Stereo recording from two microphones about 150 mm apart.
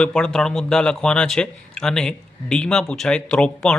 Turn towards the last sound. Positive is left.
turn(degrees=5)  # may be behind; listen again after turning